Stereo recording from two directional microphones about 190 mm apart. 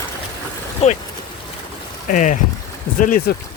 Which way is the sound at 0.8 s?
30° left (ahead or behind).